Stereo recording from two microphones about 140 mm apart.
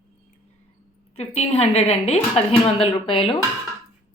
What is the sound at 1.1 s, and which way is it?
A woman's voice, 50° left (ahead or behind).